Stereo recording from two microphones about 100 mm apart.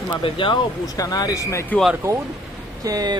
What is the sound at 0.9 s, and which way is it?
Speech, 40° left (ahead or behind).